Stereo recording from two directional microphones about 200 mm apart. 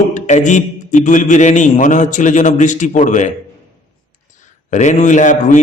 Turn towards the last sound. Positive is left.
turn(degrees=40)  # may be behind; listen again after turning